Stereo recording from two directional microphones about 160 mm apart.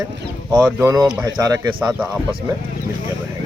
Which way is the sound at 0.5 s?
10° right (ahead or behind).